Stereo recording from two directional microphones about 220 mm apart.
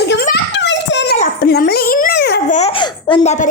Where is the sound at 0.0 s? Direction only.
50° left (ahead or behind).